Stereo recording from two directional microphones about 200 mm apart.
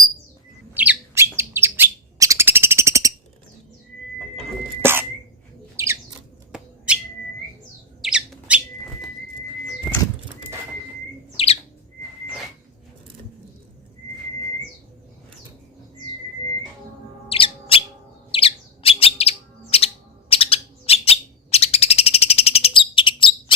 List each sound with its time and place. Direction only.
0.7 s bird: 10° right (ahead or behind)
4.8 s cough: 10° right (ahead or behind)
5.7 s bird: 15° right (ahead or behind)
8.0 s squawk: 5° right (ahead or behind)
11.4 s bird: 30° left (ahead or behind)
17.2 s bird: 25° left (ahead or behind)